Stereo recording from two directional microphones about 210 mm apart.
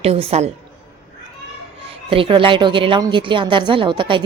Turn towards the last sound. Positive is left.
turn(degrees=-20)  # may be behind; listen again after turning